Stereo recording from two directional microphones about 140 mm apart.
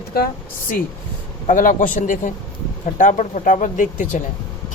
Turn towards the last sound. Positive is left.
turn(degrees=65)  # may be behind; listen again after turning